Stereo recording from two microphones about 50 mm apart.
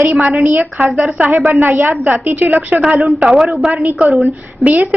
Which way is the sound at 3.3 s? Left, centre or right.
Centre.